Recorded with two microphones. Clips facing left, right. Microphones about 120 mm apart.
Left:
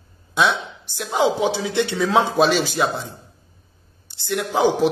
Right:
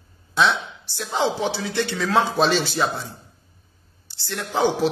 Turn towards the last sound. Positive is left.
turn(degrees=10)  # may be behind; listen again after turning